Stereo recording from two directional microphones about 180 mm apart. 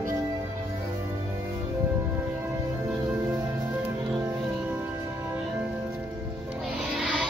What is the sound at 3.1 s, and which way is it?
Music, 15° right (ahead or behind).